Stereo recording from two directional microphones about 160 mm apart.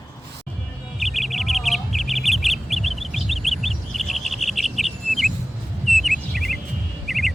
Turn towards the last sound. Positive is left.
turn(degrees=0)  # may be behind; listen again after turning